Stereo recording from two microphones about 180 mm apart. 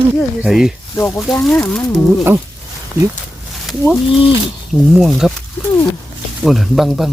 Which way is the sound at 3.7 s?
Centre (ahead or behind).